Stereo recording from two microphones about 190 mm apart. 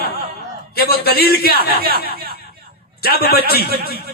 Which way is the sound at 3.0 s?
55° left (ahead or behind).